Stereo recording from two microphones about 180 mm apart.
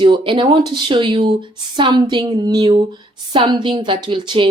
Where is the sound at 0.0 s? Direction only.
30° right (ahead or behind).